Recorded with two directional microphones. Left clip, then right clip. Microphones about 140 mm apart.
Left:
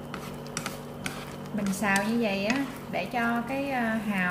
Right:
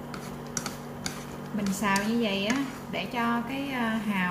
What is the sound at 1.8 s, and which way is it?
Speech, 10° right (ahead or behind).